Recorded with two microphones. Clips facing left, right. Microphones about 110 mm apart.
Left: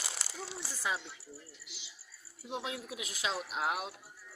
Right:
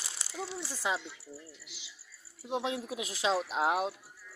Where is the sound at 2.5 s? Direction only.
25° right (ahead or behind).